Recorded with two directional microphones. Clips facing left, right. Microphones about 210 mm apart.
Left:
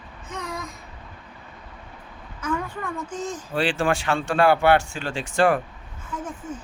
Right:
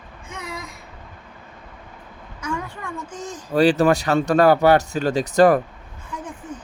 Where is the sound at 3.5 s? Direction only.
40° right (ahead or behind).